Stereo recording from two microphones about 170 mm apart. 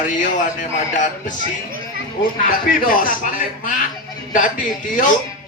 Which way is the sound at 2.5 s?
55° left (ahead or behind).